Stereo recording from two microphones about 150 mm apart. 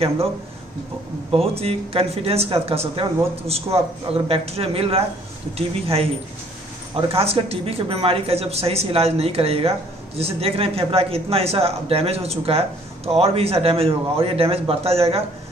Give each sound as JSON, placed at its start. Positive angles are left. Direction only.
{"t": 1.3, "sound": "speech", "side_deg": -40}
{"t": 7.1, "sound": "speech", "side_deg": -40}